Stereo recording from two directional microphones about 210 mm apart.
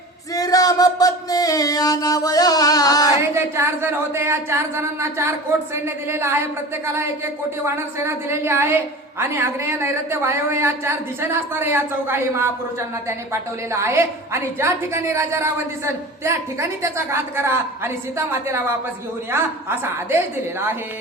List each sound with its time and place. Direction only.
0.3 s music: 15° left (ahead or behind)
3.3 s a sound: 10° right (ahead or behind)
5.7 s a woman's voice: 10° right (ahead or behind)